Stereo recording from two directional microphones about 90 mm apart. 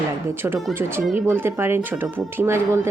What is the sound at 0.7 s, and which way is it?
Speech, 25° right (ahead or behind).